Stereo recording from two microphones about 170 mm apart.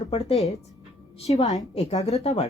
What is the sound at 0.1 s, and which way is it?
Speech, 35° left (ahead or behind).